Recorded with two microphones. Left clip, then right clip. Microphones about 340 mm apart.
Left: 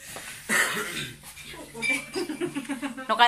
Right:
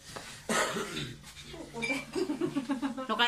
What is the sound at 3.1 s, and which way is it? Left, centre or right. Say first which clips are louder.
Speech: left 9 dB; centre.